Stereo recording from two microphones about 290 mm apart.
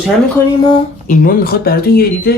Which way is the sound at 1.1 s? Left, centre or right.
Left.